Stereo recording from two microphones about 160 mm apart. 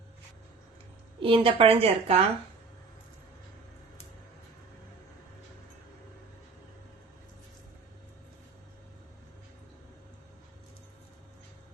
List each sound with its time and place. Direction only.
1.2 s a woman's voice: 35° right (ahead or behind)